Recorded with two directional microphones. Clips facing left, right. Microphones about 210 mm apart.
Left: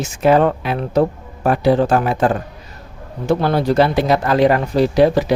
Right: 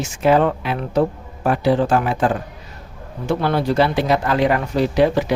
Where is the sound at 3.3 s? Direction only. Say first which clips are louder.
Left 3 dB; 40° left (ahead or behind).